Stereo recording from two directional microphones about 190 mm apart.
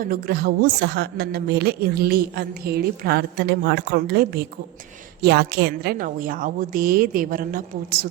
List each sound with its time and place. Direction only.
0.0 s a woman's voice: 50° right (ahead or behind)